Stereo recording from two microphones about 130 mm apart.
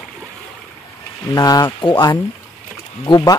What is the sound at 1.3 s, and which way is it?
Speech, 30° left (ahead or behind).